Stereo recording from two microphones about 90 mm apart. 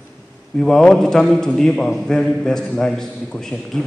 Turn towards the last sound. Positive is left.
turn(degrees=5)  # may be behind; listen again after turning